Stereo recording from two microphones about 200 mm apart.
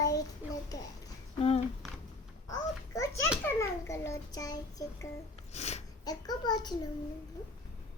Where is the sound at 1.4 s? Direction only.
30° left (ahead or behind).